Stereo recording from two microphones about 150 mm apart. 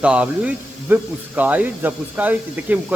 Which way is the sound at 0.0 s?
5° right (ahead or behind).